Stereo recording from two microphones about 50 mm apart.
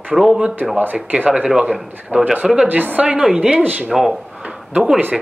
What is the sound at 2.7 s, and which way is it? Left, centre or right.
Speech, right.